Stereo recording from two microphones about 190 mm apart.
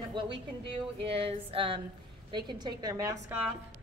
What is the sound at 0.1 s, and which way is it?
A woman's voice, 25° right (ahead or behind).